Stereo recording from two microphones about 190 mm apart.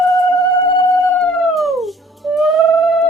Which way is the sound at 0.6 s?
25° left (ahead or behind).